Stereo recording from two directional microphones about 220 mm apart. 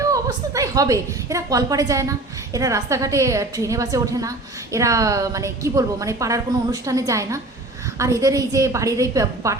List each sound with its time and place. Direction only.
0.0 s a woman's voice: 15° right (ahead or behind)